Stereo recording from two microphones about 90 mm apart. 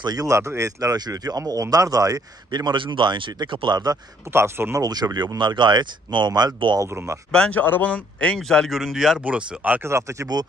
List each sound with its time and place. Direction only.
0.0 s speech: 45° right (ahead or behind)
4.3 s speech: 25° right (ahead or behind)
4.8 s speech: 50° right (ahead or behind)
6.9 s speech: 30° right (ahead or behind)
7.3 s speech: 15° left (ahead or behind); by 9.2 s 5° right (ahead or behind)
9.2 s speech: 15° right (ahead or behind)
9.8 s speech: 35° right (ahead or behind)